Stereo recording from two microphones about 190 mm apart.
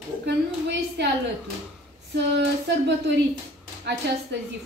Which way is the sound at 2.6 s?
65° right (ahead or behind).